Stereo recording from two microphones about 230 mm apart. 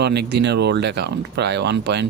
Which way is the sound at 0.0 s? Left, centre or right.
Right.